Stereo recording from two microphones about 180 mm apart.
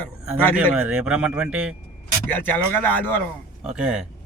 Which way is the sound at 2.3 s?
10° left (ahead or behind).